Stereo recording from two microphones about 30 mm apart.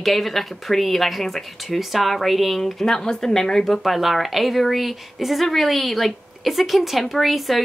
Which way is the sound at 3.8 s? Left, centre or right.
Centre.